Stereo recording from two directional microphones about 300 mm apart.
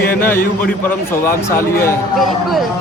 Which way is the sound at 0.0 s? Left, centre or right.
Left.